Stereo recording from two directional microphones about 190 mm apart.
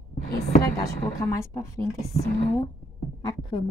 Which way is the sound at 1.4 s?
15° left (ahead or behind).